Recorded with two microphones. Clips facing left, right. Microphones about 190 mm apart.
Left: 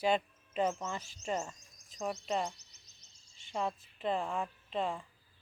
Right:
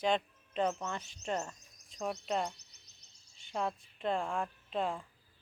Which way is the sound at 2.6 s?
65° right (ahead or behind).